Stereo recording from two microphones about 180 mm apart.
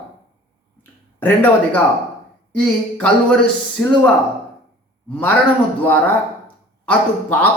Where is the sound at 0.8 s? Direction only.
10° left (ahead or behind).